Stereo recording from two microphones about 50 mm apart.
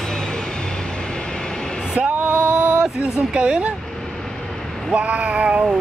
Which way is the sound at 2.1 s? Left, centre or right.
Right.